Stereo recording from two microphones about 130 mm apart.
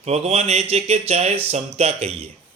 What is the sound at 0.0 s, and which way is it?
Speech, 55° right (ahead or behind).